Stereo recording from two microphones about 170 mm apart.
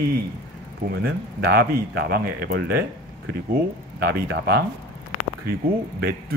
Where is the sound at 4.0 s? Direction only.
65° right (ahead or behind).